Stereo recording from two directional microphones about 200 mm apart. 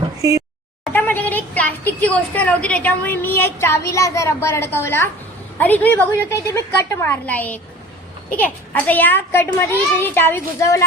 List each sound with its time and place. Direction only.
0.2 s speech: 15° right (ahead or behind)
0.9 s a woman's voice: 10° left (ahead or behind)
8.7 s a woman's voice: 10° left (ahead or behind)